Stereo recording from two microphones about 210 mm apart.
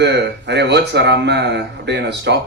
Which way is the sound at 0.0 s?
55° right (ahead or behind).